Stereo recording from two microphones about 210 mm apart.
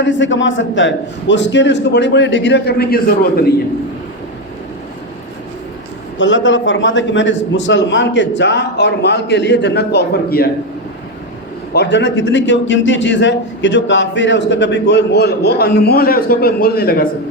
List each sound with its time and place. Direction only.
0.0 s a man's voice: 60° left (ahead or behind)
6.1 s a man's voice: 60° left (ahead or behind); by 10.5 s 45° left (ahead or behind)
11.7 s a man's voice: 55° left (ahead or behind)